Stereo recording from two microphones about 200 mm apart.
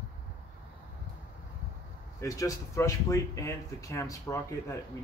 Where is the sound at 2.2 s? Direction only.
15° left (ahead or behind).